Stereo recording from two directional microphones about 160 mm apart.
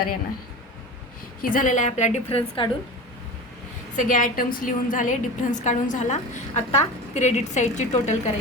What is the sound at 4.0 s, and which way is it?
A woman's voice, 55° left (ahead or behind).